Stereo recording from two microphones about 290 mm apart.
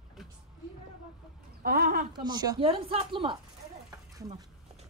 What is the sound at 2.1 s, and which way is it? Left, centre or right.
Speech, centre.